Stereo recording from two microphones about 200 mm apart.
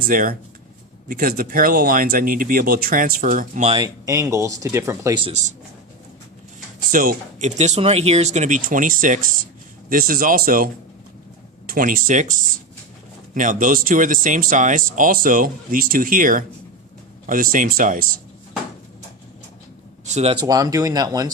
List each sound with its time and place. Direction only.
0.1 s speech: 45° right (ahead or behind)
3.8 s speech: 15° right (ahead or behind)
6.9 s speech: 45° right (ahead or behind)
20.1 s speech: 30° right (ahead or behind)
20.4 s speech: 20° right (ahead or behind)